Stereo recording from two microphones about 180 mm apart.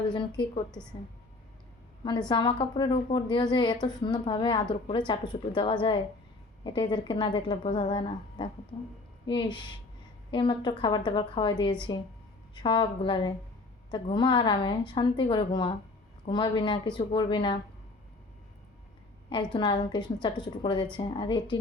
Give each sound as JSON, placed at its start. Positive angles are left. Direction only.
{"t": 0.1, "sound": "a woman's voice", "side_deg": 25}
{"t": 0.7, "sound": "a woman's voice", "side_deg": 5}
{"t": 2.3, "sound": "a woman's voice", "side_deg": 25}
{"t": 19.5, "sound": "a woman's voice", "side_deg": 25}